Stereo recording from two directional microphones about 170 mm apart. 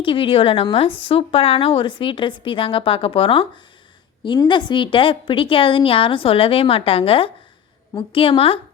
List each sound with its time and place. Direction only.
0.0 s speech: 30° left (ahead or behind)